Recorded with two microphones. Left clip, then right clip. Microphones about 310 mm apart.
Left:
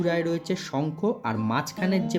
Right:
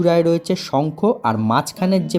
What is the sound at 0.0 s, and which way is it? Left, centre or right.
Speech, centre.